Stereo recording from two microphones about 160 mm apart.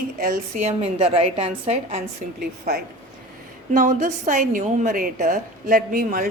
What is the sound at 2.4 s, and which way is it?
Speech, 75° right (ahead or behind).